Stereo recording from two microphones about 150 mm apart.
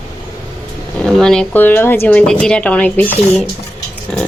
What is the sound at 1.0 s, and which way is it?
Speech, 5° left (ahead or behind).